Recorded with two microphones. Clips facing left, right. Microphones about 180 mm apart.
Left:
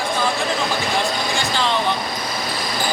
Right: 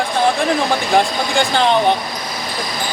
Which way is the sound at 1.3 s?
60° right (ahead or behind).